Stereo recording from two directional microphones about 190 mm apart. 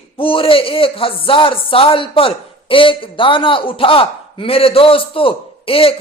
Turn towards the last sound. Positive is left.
turn(degrees=30)  # may be behind; listen again after turning